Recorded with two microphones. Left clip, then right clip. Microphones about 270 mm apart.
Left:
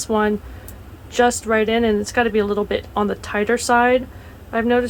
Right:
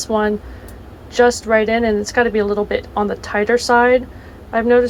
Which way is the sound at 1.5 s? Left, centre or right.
Centre.